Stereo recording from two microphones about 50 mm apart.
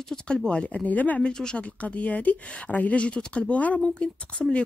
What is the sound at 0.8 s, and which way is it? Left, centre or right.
Speech, left.